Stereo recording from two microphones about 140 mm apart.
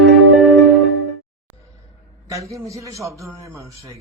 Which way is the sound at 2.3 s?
20° right (ahead or behind).